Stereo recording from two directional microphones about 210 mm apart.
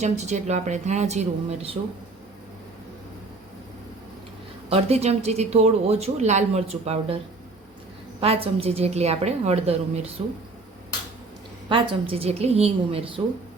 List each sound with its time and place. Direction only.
0.0 s speech: 35° right (ahead or behind)
4.7 s speech: 30° right (ahead or behind)
8.2 s a woman's voice: 30° right (ahead or behind)
11.7 s a woman's voice: 25° right (ahead or behind)